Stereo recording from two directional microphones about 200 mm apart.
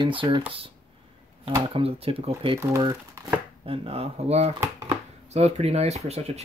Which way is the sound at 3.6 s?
30° right (ahead or behind).